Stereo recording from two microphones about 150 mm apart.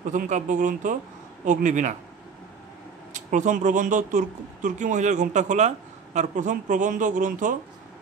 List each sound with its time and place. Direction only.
0.1 s speech: 60° right (ahead or behind)
3.1 s speech: 55° right (ahead or behind)